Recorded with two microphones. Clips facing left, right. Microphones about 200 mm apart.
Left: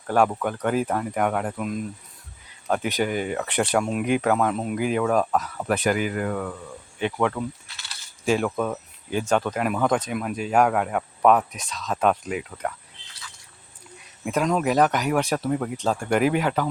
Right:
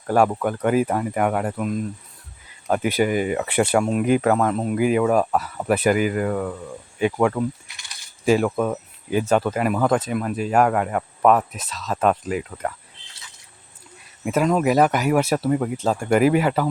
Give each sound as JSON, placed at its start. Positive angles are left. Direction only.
{"t": 0.1, "sound": "speech", "side_deg": -10}
{"t": 14.3, "sound": "speech", "side_deg": -5}